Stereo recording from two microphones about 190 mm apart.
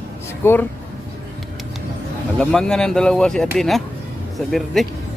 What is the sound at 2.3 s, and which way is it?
Speech, 5° left (ahead or behind).